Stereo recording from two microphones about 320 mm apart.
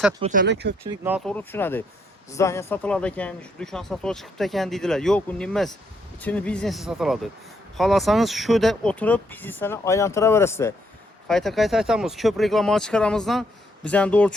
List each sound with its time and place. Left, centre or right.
0.2 s speech: right
0.9 s speech: centre